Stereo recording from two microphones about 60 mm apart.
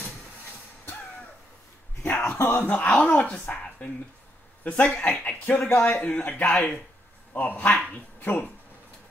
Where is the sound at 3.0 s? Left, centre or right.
Centre.